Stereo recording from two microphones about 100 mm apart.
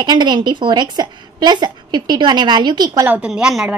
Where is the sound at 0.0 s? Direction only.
45° right (ahead or behind).